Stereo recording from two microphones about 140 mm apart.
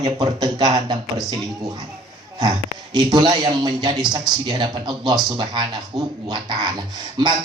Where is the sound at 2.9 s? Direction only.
30° right (ahead or behind).